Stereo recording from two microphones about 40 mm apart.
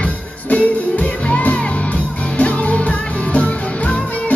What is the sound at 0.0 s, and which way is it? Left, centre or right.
Music, left.